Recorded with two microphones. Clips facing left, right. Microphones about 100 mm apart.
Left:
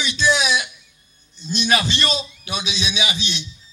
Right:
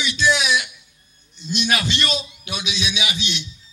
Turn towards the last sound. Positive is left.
turn(degrees=30)  # may be behind; listen again after turning